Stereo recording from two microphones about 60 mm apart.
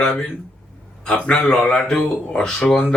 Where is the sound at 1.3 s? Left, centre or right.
Centre.